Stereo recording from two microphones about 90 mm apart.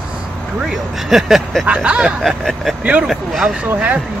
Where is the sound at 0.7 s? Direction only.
5° right (ahead or behind).